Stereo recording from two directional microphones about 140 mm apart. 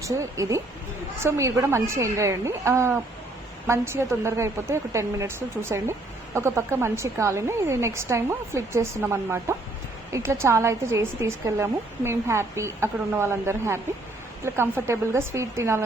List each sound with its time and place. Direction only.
0.0 s a woman's voice: 20° right (ahead or behind)